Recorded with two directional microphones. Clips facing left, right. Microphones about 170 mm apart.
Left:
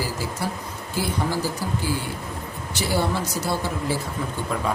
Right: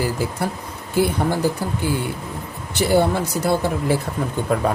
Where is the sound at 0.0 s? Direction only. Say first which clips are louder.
Right 5 dB; 60° right (ahead or behind).